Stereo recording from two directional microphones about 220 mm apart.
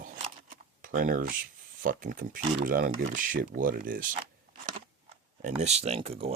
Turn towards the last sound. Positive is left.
turn(degrees=-25)  # may be behind; listen again after turning